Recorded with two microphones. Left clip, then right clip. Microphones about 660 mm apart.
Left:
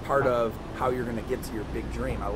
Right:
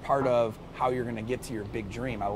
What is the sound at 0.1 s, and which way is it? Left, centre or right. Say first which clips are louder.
Speech: left 1 dB; right.